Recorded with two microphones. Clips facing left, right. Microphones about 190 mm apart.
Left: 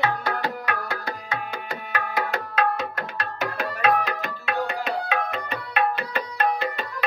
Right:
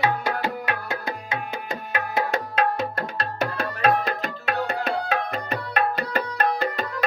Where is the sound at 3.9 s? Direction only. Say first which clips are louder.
Even; 35° right (ahead or behind).